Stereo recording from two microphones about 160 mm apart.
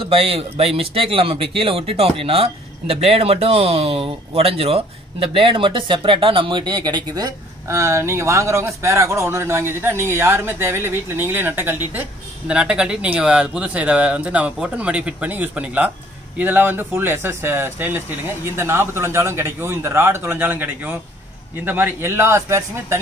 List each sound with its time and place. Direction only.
0.0 s speech: 35° right (ahead or behind); by 22.9 s 15° right (ahead or behind)